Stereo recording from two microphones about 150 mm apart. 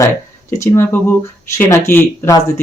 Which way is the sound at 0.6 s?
20° left (ahead or behind).